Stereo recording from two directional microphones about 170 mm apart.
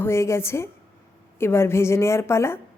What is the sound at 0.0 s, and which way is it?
A woman's voice, 15° left (ahead or behind).